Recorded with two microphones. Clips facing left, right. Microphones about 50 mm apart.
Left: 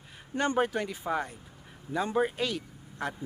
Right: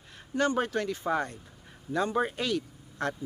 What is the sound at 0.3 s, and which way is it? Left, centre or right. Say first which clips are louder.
Speech: even; left.